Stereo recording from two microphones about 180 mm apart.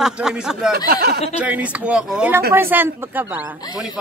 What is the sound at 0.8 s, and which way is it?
Speech, 65° right (ahead or behind).